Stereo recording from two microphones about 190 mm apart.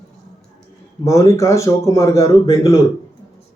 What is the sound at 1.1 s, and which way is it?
A man's voice, 15° left (ahead or behind).